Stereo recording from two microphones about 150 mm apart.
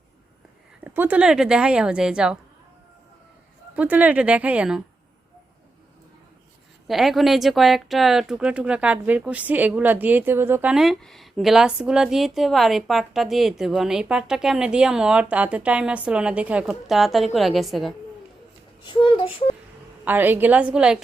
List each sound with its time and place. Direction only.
0.9 s speech: 10° right (ahead or behind)
3.8 s speech: 10° right (ahead or behind)
6.8 s speech: centre (ahead or behind)
18.9 s speech: 35° left (ahead or behind)
20.1 s speech: 15° right (ahead or behind)